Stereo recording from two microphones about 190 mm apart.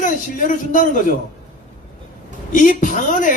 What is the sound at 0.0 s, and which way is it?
A man's voice, 45° left (ahead or behind).